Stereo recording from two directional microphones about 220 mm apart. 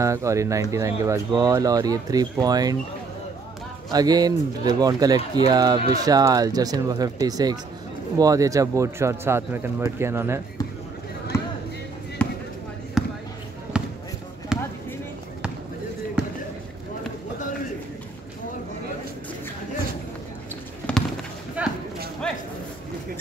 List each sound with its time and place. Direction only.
0.0 s speech: 15° right (ahead or behind)
3.9 s speech: 15° right (ahead or behind)
12.2 s basketball bounce: 5° left (ahead or behind)
21.6 s livestock: 5° right (ahead or behind)